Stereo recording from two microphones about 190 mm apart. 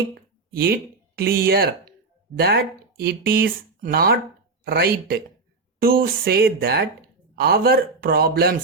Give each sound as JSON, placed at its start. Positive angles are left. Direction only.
{"t": 0.1, "sound": "speech", "side_deg": -55}
{"t": 3.0, "sound": "speech", "side_deg": -55}